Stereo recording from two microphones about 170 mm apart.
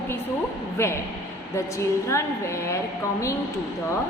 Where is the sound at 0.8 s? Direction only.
15° left (ahead or behind).